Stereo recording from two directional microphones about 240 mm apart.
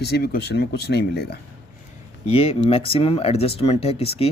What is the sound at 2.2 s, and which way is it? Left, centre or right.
Speech, left.